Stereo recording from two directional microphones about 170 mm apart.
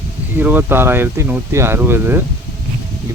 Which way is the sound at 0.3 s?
10° right (ahead or behind).